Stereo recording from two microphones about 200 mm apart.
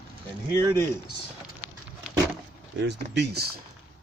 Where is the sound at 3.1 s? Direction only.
55° right (ahead or behind).